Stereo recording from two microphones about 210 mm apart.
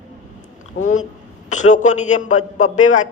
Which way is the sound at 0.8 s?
35° left (ahead or behind).